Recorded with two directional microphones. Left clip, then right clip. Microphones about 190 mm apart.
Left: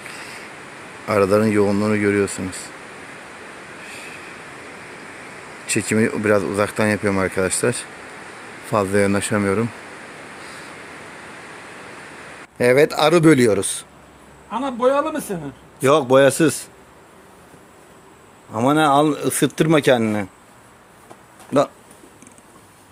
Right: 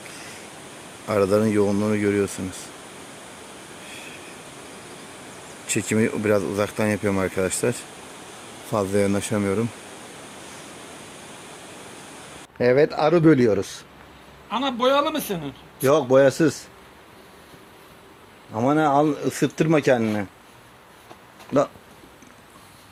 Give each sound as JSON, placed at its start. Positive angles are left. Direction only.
{"t": 1.0, "sound": "speech", "side_deg": 0}
{"t": 5.6, "sound": "speech", "side_deg": 0}
{"t": 12.5, "sound": "a man's voice", "side_deg": 5}
{"t": 14.5, "sound": "a man's voice", "side_deg": 20}
{"t": 18.5, "sound": "a man's voice", "side_deg": 10}
{"t": 21.5, "sound": "speech", "side_deg": 5}